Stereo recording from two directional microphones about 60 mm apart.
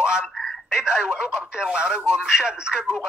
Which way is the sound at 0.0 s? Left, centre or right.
Centre.